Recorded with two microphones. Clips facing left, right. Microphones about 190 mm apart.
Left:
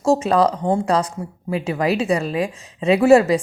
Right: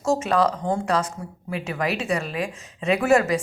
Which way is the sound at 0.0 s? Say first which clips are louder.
Left 4 dB; 30° left (ahead or behind).